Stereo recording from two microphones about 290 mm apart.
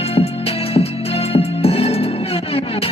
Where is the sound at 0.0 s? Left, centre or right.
Centre.